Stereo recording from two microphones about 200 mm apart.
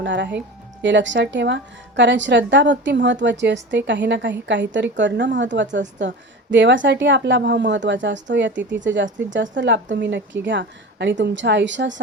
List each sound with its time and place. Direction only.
0.0 s speech: 65° right (ahead or behind)